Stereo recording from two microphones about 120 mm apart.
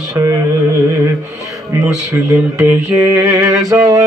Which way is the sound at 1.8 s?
25° right (ahead or behind).